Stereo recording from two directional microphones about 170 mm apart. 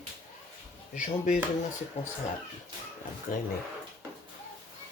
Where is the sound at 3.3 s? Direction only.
50° left (ahead or behind).